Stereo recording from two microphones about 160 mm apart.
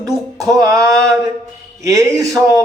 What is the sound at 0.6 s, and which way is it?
Speech, 20° right (ahead or behind).